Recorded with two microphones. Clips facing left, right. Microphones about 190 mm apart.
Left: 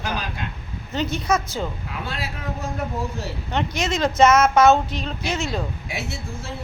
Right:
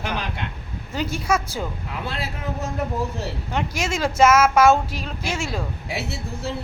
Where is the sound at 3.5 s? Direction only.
5° right (ahead or behind).